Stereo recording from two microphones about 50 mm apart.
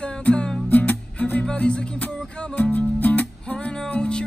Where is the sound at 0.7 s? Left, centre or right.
Left.